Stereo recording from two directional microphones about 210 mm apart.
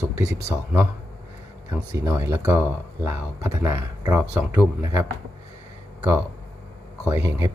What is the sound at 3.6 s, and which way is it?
Speech, 15° right (ahead or behind).